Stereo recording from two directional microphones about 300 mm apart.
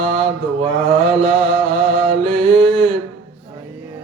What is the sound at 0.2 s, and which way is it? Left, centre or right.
Mantra, centre.